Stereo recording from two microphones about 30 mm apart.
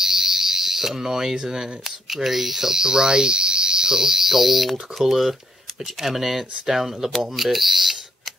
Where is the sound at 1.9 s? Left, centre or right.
Centre.